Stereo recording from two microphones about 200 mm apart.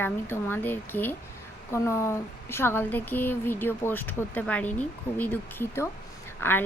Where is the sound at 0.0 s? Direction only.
10° left (ahead or behind).